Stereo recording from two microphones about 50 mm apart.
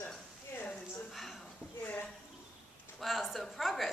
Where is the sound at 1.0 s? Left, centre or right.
Centre.